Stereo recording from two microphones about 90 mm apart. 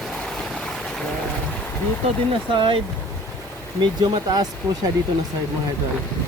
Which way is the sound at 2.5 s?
65° right (ahead or behind).